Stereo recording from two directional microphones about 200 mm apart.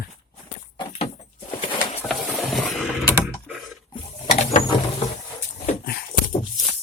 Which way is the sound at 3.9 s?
35° left (ahead or behind).